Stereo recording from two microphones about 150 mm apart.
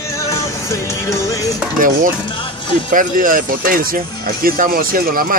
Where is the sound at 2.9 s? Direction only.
65° right (ahead or behind).